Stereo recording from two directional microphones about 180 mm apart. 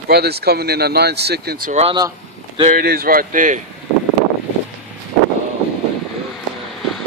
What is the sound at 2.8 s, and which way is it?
Speech, 55° right (ahead or behind).